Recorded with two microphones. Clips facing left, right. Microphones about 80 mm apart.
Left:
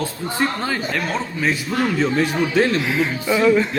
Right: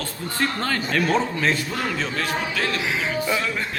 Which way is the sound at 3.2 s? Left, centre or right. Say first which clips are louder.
Left 9 dB; centre.